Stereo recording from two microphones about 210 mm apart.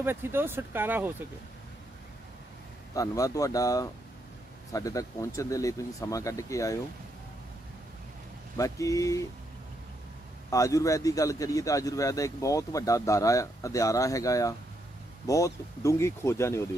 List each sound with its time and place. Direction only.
0.0 s speech: 10° right (ahead or behind)
2.9 s speech: 15° left (ahead or behind)
8.5 s speech: 15° left (ahead or behind)
10.5 s speech: 15° left (ahead or behind)